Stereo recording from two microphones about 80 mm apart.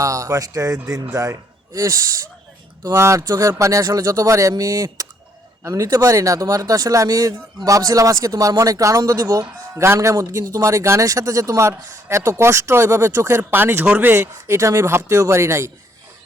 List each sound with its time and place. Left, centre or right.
0.0 s a man's voice: right